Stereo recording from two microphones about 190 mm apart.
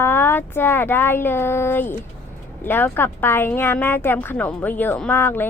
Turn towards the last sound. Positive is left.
turn(degrees=10)  # may be behind; listen again after turning